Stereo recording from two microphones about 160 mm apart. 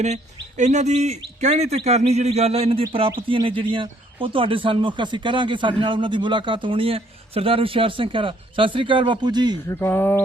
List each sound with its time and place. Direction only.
0.0 s a man's voice: 45° right (ahead or behind); by 9.6 s 25° right (ahead or behind)
9.6 s speech: 15° left (ahead or behind)